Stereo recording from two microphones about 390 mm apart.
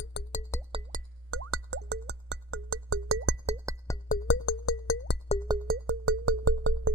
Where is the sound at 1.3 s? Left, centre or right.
Right.